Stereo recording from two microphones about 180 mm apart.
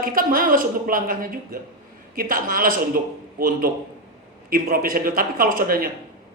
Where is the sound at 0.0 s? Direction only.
50° right (ahead or behind).